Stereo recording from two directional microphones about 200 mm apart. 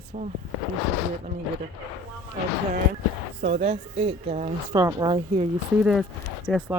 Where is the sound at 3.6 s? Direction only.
30° right (ahead or behind).